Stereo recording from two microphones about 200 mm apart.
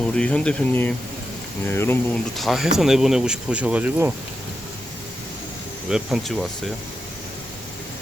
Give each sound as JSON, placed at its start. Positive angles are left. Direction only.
{"t": 0.0, "sound": "speech", "side_deg": 5}
{"t": 2.3, "sound": "speech", "side_deg": 0}
{"t": 5.9, "sound": "speech", "side_deg": 0}